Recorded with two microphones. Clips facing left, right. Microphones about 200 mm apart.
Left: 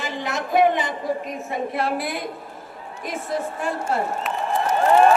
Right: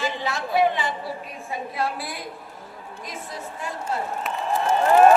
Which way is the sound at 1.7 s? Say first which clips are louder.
Left 3 dB; 60° left (ahead or behind).